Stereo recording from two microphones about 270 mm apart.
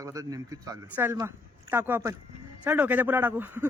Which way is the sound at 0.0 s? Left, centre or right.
Centre.